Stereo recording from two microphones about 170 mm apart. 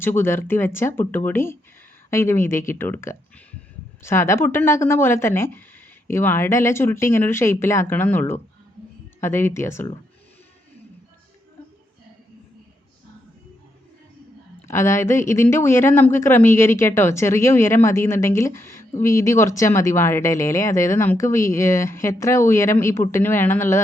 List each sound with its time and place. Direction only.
0.0 s speech: 15° left (ahead or behind)
14.7 s speech: 15° left (ahead or behind)